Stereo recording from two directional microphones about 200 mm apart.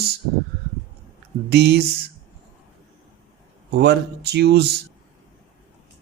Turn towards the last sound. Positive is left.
turn(degrees=-55)  # may be behind; listen again after turning